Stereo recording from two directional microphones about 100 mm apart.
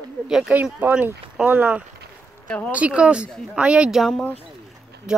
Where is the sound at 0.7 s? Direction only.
20° right (ahead or behind).